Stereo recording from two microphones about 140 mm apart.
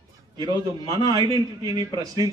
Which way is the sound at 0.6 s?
30° left (ahead or behind).